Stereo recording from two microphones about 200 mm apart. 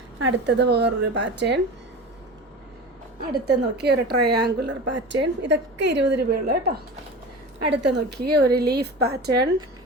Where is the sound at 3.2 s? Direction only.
55° right (ahead or behind).